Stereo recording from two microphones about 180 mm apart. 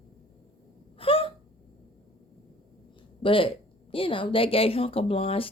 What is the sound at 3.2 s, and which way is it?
A woman's voice, 30° left (ahead or behind).